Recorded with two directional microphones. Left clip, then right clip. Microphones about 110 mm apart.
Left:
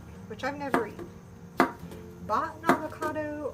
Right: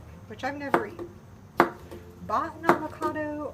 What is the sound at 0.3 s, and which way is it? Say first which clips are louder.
Speech: right 1 dB; 35° left (ahead or behind).